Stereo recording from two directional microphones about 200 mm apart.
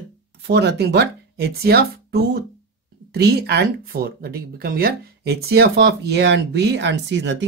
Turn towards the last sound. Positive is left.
turn(degrees=-65)  # may be behind; listen again after turning